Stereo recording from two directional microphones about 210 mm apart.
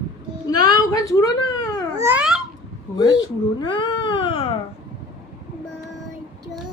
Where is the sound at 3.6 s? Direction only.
20° left (ahead or behind).